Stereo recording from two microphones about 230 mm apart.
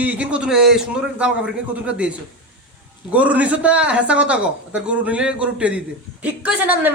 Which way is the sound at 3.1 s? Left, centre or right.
Centre.